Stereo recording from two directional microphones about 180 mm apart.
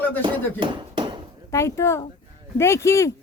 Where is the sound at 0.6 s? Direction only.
25° right (ahead or behind).